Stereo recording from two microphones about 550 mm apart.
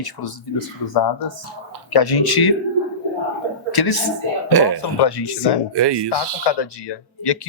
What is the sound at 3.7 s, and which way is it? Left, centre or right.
Speech, left.